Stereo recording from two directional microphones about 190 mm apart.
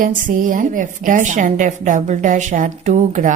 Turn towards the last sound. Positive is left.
turn(degrees=-40)  # may be behind; listen again after turning